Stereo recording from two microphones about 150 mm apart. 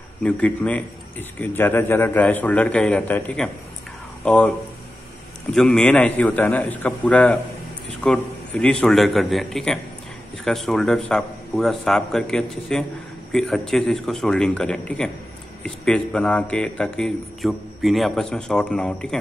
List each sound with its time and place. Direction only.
0.2 s a man's voice: 10° left (ahead or behind)